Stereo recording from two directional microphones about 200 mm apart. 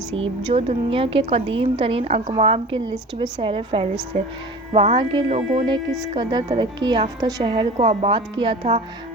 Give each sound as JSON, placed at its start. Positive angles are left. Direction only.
{"t": 0.1, "sound": "a woman's voice", "side_deg": -30}